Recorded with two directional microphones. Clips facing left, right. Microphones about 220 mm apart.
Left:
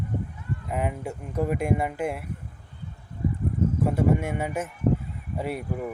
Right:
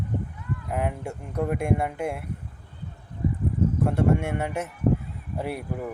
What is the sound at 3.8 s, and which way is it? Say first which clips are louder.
Speech: even; centre (ahead or behind).